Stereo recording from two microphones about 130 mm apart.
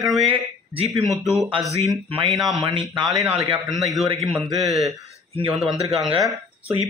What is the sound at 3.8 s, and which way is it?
A man's voice, centre (ahead or behind).